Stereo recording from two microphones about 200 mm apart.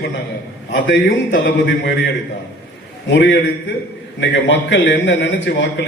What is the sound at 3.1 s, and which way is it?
A man's voice, 60° left (ahead or behind).